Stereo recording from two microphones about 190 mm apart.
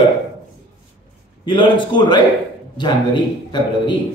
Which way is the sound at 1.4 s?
25° left (ahead or behind).